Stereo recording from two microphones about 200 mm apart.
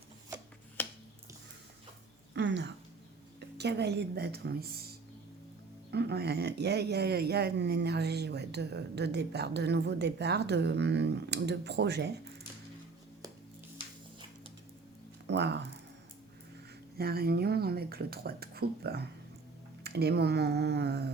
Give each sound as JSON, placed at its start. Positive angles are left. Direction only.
{"t": 0.8, "sound": "music", "side_deg": 10}
{"t": 2.3, "sound": "a sound", "side_deg": -60}
{"t": 3.6, "sound": "speech", "side_deg": -55}
{"t": 15.3, "sound": "speech", "side_deg": -60}
{"t": 17.0, "sound": "speech", "side_deg": -50}